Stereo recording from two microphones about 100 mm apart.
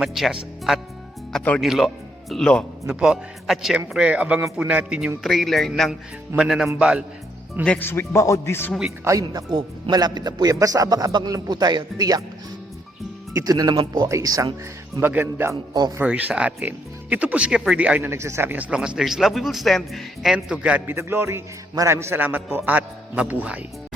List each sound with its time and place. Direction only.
0.0 s a man's voice: 5° right (ahead or behind)
2.8 s a man's voice: 5° right (ahead or behind)
3.8 s speech: 15° right (ahead or behind)
5.2 s a man's voice: centre (ahead or behind)
7.6 s speech: 10° left (ahead or behind)
7.9 s speech: 25° left (ahead or behind)
9.2 s a man's voice: 40° right (ahead or behind)
13.3 s a man's voice: 40° right (ahead or behind)
14.1 s a man's voice: 35° right (ahead or behind)
15.0 s a man's voice: 20° right (ahead or behind)
18.1 s a man's voice: 25° right (ahead or behind)
18.5 s speech: 15° right (ahead or behind)